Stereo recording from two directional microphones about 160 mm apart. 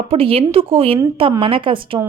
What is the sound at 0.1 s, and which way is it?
Speech, 35° right (ahead or behind).